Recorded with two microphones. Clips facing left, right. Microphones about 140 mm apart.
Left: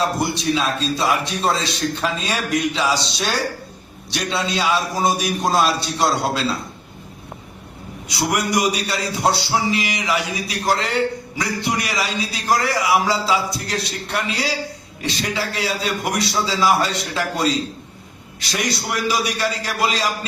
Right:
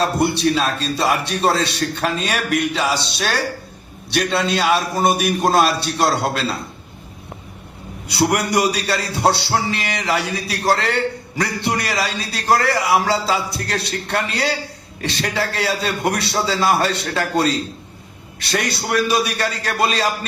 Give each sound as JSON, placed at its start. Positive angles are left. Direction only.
{"t": 0.0, "sound": "a man's voice", "side_deg": -65}
{"t": 8.0, "sound": "a man's voice", "side_deg": -65}